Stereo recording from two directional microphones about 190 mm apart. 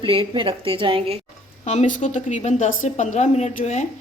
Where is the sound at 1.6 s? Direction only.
35° left (ahead or behind).